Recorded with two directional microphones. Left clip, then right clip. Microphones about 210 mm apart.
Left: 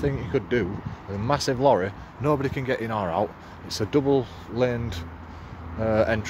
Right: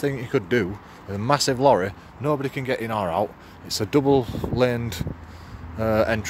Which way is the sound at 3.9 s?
30° right (ahead or behind).